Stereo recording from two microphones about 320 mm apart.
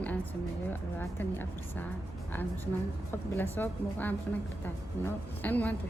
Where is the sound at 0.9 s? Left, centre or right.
Centre.